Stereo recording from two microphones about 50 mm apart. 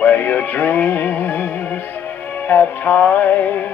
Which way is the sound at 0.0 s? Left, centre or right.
Left.